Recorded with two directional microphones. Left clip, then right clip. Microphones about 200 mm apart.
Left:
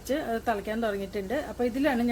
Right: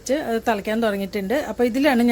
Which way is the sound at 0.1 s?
30° right (ahead or behind).